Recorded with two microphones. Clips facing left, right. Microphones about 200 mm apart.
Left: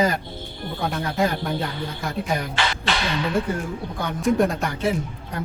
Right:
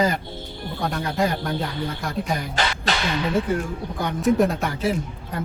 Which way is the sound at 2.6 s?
40° right (ahead or behind).